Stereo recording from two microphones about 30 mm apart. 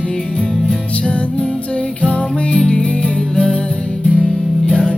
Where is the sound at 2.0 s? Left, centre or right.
Left.